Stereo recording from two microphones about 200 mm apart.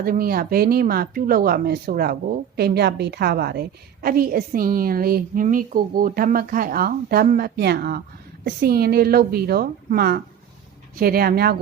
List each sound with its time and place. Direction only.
0.0 s a woman's voice: 45° right (ahead or behind)